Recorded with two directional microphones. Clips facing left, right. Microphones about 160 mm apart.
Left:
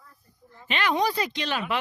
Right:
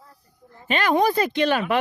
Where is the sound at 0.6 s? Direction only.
45° right (ahead or behind).